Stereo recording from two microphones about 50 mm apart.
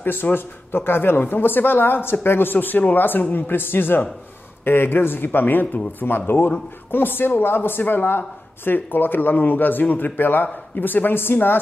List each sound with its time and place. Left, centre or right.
0.0 s speech: left